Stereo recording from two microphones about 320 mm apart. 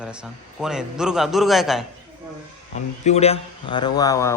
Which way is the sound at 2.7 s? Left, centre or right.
Left.